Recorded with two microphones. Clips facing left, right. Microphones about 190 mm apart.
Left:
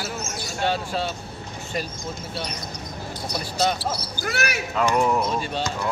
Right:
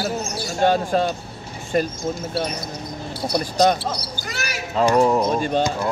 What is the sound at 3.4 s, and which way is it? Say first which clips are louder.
Speech: right 6 dB; 45° right (ahead or behind).